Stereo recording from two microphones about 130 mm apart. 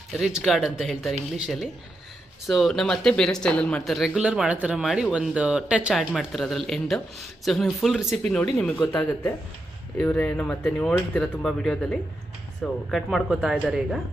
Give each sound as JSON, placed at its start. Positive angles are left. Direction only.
{"t": 0.2, "sound": "speech", "side_deg": 0}
{"t": 2.5, "sound": "speech", "side_deg": 0}
{"t": 8.9, "sound": "speech", "side_deg": 15}